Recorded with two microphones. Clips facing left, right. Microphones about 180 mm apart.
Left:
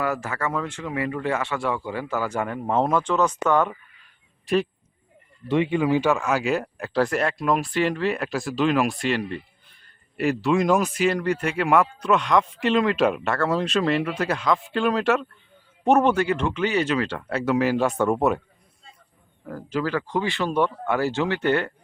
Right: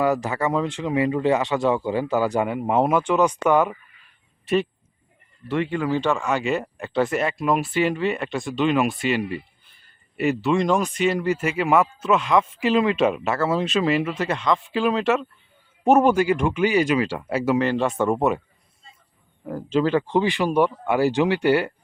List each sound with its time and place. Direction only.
0.0 s speech: 20° right (ahead or behind); by 4.7 s centre (ahead or behind)
5.5 s speech: 15° left (ahead or behind); by 17.6 s 10° right (ahead or behind)
17.6 s speech: 5° left (ahead or behind)
19.5 s speech: 20° right (ahead or behind)